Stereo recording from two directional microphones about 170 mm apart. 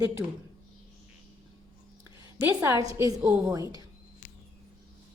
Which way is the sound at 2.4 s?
15° right (ahead or behind).